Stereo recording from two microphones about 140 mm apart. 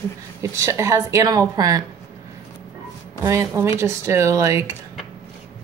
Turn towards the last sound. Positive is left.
turn(degrees=-20)  # may be behind; listen again after turning